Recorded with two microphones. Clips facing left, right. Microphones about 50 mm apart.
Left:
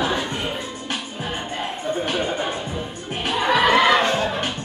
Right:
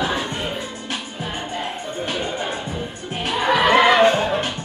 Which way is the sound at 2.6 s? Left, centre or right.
Centre.